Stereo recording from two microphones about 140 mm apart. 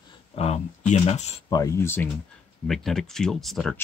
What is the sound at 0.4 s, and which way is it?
Speech, 50° left (ahead or behind).